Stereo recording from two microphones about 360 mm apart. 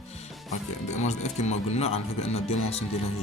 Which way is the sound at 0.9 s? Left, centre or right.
Centre.